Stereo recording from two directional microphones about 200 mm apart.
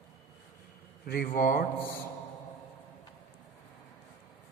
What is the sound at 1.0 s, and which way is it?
Speech, 45° left (ahead or behind).